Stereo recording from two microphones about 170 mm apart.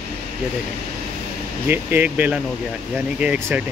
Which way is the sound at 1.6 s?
10° right (ahead or behind).